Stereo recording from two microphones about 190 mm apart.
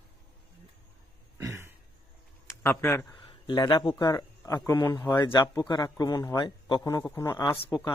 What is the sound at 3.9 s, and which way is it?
A man's voice, 20° left (ahead or behind).